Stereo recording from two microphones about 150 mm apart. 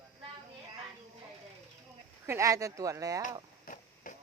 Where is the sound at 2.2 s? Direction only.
20° right (ahead or behind).